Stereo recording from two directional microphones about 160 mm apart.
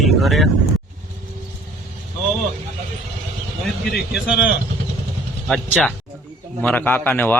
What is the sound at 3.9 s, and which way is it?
A man's voice, 5° right (ahead or behind).